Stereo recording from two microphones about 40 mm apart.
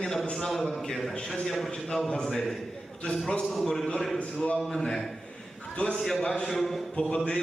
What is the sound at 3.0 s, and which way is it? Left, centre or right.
Speech, left.